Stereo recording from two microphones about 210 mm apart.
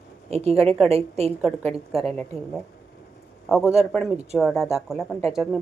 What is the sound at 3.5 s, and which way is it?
Speech, 5° right (ahead or behind).